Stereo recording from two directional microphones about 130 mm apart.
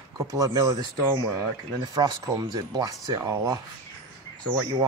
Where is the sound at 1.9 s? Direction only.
30° right (ahead or behind).